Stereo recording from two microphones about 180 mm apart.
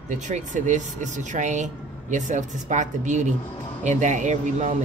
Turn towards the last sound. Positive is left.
turn(degrees=-40)  # may be behind; listen again after turning